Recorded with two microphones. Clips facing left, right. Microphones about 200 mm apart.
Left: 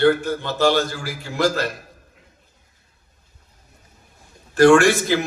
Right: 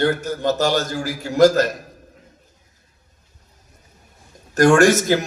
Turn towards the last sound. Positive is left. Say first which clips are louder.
# right 2 dB
turn(degrees=-40)  # may be behind; listen again after turning